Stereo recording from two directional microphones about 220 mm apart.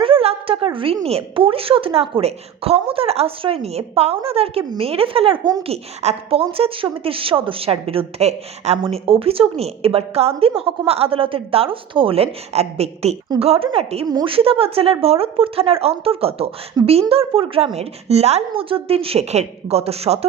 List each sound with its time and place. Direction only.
0.0 s a woman's voice: 25° right (ahead or behind)